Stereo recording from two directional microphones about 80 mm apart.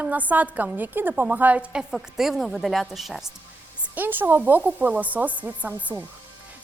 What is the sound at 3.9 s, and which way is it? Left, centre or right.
A woman's voice, right.